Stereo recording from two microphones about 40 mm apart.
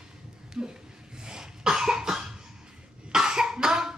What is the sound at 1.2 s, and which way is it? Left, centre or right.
Cough, centre.